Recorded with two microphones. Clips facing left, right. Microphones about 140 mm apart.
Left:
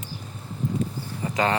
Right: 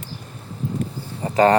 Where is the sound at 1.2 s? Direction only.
35° right (ahead or behind).